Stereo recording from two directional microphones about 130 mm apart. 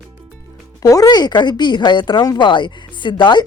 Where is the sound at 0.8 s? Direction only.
25° left (ahead or behind).